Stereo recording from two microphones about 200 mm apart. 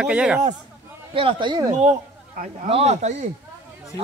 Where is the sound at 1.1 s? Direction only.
25° right (ahead or behind).